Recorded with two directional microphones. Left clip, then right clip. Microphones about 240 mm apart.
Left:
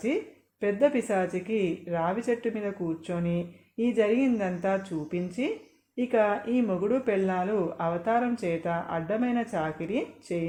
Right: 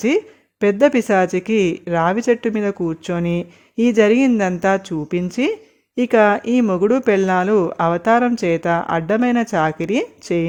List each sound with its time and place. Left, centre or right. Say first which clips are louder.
0.6 s speech: right 10 dB; right